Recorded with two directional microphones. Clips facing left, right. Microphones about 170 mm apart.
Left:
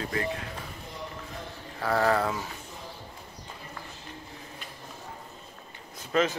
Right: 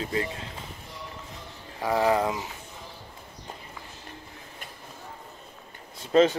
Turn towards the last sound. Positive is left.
turn(degrees=-30)  # may be behind; listen again after turning